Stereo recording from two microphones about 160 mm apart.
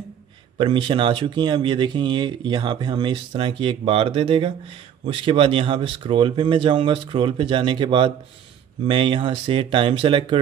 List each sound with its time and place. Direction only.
0.6 s speech: 30° right (ahead or behind)